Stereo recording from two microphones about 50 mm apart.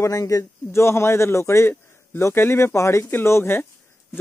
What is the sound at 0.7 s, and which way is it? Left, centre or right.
A man's voice, left.